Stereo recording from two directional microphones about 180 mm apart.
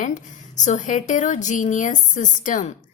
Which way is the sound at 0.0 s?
45° left (ahead or behind).